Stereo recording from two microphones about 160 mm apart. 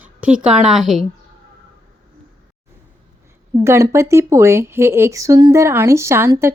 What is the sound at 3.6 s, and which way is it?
Speech, 15° right (ahead or behind).